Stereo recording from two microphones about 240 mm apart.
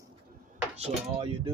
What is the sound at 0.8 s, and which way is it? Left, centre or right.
Speech, right.